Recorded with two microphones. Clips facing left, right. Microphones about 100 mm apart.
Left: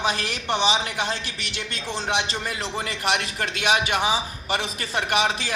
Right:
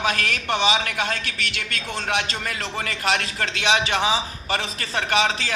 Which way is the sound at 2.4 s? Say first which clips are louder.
Even; 10° left (ahead or behind).